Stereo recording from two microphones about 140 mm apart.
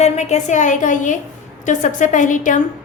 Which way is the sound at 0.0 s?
55° left (ahead or behind).